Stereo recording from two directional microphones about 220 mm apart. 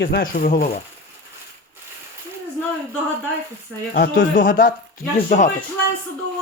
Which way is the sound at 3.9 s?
45° left (ahead or behind).